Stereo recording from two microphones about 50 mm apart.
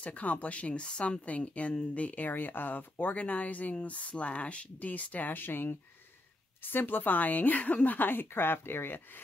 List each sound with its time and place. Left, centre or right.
0.0 s a woman's voice: left